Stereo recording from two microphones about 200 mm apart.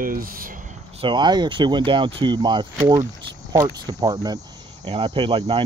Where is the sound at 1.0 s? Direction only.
20° right (ahead or behind).